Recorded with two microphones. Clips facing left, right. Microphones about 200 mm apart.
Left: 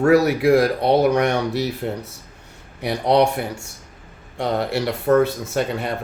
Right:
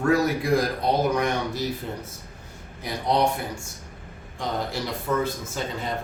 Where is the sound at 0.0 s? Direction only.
70° left (ahead or behind).